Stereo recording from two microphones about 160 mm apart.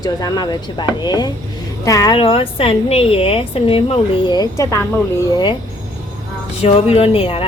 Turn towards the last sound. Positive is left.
turn(degrees=35)  # may be behind; listen again after turning